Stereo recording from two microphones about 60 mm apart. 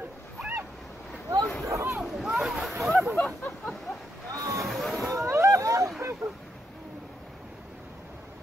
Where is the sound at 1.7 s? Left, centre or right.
Right.